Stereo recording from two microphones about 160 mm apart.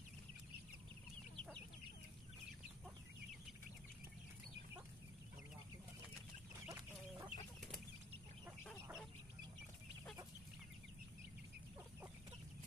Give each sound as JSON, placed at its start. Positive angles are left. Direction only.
{"t": 6.6, "sound": "chicken", "side_deg": -15}